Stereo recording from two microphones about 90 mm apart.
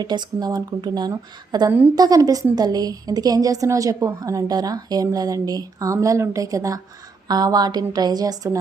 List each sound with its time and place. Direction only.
0.0 s a woman's voice: 55° right (ahead or behind)